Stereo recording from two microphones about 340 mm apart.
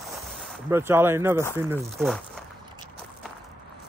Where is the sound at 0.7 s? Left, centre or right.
Centre.